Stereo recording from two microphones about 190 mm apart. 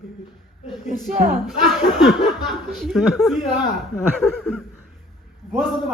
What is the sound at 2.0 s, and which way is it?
A woman's voice, centre (ahead or behind).